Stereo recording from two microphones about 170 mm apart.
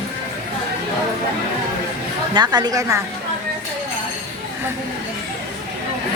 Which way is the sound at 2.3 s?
25° right (ahead or behind).